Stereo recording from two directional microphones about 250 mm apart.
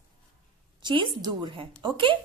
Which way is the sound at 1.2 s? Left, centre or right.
Centre.